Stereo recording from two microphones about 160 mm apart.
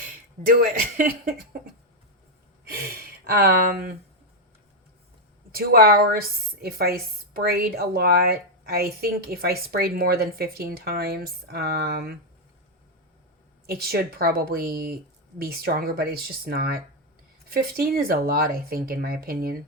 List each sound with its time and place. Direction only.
0.0 s speech: 60° right (ahead or behind)
2.6 s speech: 70° right (ahead or behind)
5.5 s a woman's voice: 70° right (ahead or behind)
13.7 s a woman's voice: 75° right (ahead or behind)